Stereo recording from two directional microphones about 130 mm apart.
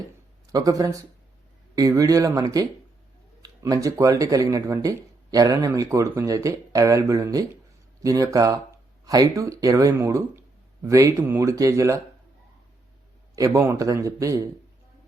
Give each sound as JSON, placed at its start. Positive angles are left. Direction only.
{"t": 0.5, "sound": "speech", "side_deg": -30}
{"t": 13.3, "sound": "speech", "side_deg": -25}